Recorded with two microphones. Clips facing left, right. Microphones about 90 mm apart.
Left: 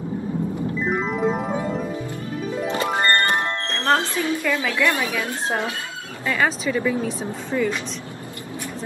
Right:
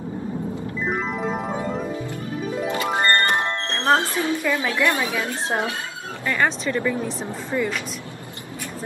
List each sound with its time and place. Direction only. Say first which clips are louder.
0.8 s music: left 3 dB; centre (ahead or behind)
2.9 s music: right 1 dB; 20° right (ahead or behind)
4.1 s a woman's voice: even; 25° right (ahead or behind)
6.2 s a woman's voice: left 1 dB; 10° left (ahead or behind)